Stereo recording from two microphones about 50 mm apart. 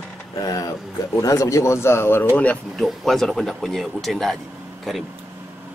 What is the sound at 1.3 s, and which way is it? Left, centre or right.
Speech, left.